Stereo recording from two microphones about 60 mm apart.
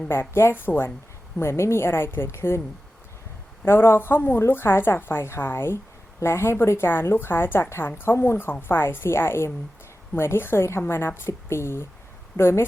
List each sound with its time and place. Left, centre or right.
0.1 s a woman's voice: left
1.4 s a woman's voice: left
3.6 s a woman's voice: left